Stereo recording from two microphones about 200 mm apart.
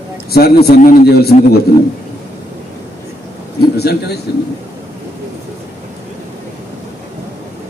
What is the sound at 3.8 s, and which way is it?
Speech, 55° left (ahead or behind).